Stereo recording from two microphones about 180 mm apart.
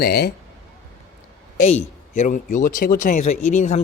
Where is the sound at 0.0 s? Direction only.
60° left (ahead or behind).